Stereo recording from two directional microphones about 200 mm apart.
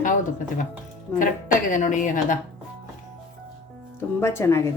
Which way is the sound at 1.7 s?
40° left (ahead or behind).